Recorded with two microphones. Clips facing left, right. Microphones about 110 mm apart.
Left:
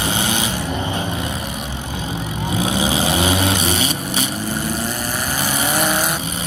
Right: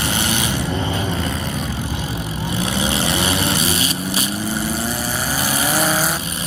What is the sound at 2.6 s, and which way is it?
Vehicle, 15° left (ahead or behind).